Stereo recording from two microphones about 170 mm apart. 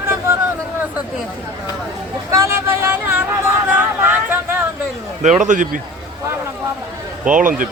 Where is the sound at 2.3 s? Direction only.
15° right (ahead or behind).